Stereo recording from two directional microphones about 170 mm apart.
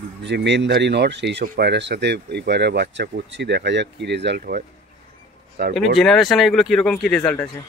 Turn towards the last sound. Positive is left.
turn(degrees=5)  # may be behind; listen again after turning